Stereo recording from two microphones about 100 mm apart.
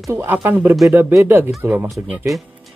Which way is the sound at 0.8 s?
30° right (ahead or behind).